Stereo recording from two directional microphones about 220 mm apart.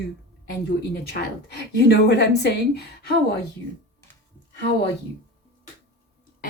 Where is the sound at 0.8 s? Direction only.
50° left (ahead or behind).